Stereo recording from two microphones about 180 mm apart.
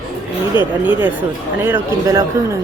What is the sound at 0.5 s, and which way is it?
Speech, 25° left (ahead or behind).